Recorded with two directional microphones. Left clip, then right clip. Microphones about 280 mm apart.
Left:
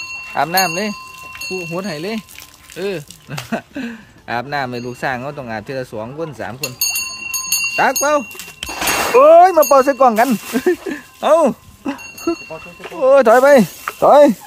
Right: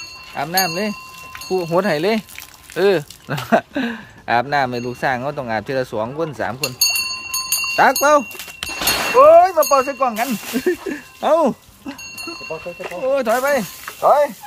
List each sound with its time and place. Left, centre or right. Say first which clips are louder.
0.3 s speech: left 4 dB; centre
1.5 s speech: right 7 dB; centre
8.6 s a sound: left 2 dB; centre
9.2 s speech: left 2 dB; left
10.5 s speech: left 3 dB; centre; by 13.7 s left